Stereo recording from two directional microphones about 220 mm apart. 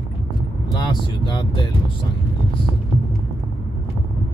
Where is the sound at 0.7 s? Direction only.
20° left (ahead or behind).